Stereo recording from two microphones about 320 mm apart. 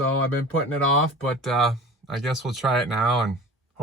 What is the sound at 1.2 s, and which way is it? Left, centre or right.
Speech, centre.